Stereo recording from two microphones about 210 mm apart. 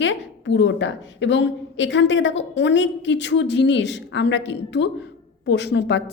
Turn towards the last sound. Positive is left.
turn(degrees=55)  # may be behind; listen again after turning